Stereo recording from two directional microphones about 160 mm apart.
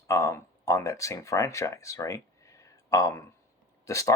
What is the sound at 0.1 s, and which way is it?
Speech, 15° left (ahead or behind).